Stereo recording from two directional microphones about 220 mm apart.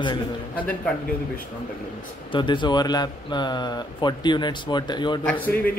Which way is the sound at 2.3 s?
20° left (ahead or behind).